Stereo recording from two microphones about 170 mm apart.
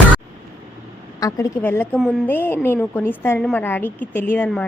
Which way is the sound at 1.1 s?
20° left (ahead or behind).